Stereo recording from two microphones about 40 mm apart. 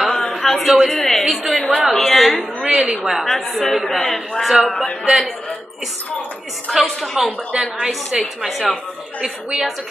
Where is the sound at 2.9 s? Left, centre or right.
Centre.